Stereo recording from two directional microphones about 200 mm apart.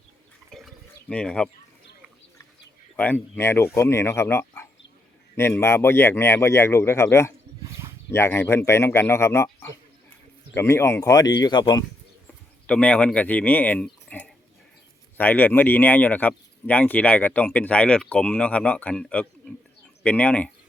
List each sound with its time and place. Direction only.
0.5 s drip: 5° left (ahead or behind)
1.1 s speech: 5° left (ahead or behind)
2.9 s speech: 10° left (ahead or behind)
12.6 s speech: 5° left (ahead or behind)